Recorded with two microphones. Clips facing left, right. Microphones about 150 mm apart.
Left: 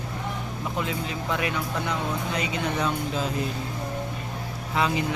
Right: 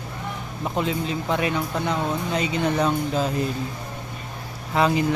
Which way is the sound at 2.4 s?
40° right (ahead or behind).